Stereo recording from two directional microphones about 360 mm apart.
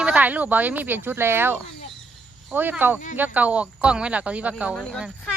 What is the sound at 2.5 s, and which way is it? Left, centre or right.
Speech, centre.